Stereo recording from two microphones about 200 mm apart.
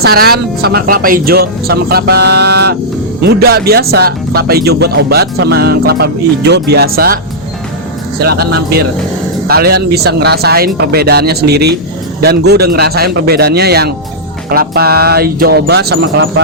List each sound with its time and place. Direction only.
0.0 s speech: 50° right (ahead or behind)
8.2 s speech: 50° right (ahead or behind)
9.5 s speech: 50° right (ahead or behind)